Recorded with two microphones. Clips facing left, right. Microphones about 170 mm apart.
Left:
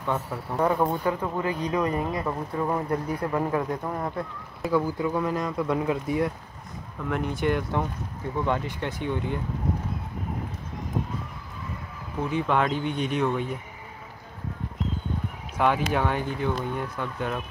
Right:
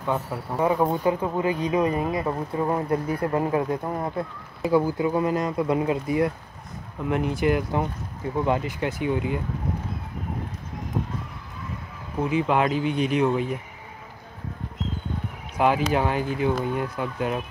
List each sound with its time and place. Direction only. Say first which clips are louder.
0.0 s speech: right 2 dB; 10° right (ahead or behind)
2.9 s speech: right 3 dB; 5° right (ahead or behind)
3.3 s speech: right 2 dB; 20° right (ahead or behind); by 9.4 s 5° right (ahead or behind)
12.2 s speech: right 3 dB; 5° right (ahead or behind)
15.6 s speech: right 2 dB; 5° right (ahead or behind)